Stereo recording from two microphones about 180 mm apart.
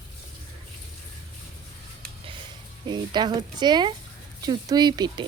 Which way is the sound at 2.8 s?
25° right (ahead or behind).